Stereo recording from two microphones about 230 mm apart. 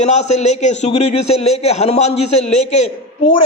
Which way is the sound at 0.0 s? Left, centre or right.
Left.